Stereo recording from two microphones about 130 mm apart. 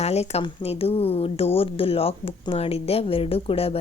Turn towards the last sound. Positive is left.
turn(degrees=50)  # may be behind; listen again after turning